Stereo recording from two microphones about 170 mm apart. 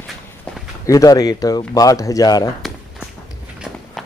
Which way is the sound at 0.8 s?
20° left (ahead or behind).